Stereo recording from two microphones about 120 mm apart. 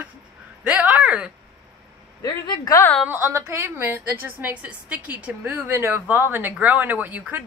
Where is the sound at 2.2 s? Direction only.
35° left (ahead or behind).